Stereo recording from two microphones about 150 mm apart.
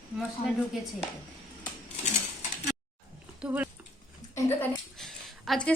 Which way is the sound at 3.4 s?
10° right (ahead or behind).